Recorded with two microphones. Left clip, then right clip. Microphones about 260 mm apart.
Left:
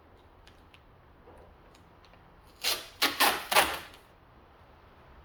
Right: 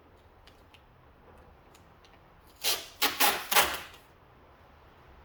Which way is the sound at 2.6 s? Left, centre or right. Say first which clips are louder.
Left 1 dB; centre.